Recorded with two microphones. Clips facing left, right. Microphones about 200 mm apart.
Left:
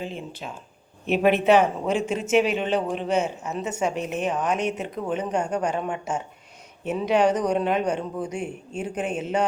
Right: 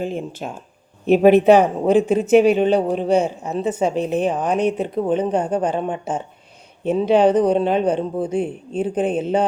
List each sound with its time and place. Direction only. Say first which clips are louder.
0.0 s speech: right 8 dB; 45° right (ahead or behind); by 9.4 s 30° right (ahead or behind)